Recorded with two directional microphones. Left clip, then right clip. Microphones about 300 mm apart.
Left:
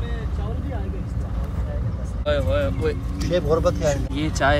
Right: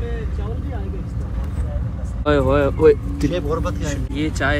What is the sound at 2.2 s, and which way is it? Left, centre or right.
Speech, centre.